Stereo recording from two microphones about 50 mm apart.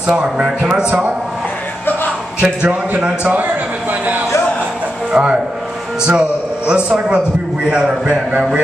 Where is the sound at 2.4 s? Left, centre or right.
Centre.